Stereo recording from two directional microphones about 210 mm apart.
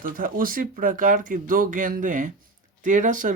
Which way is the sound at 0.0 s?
40° right (ahead or behind).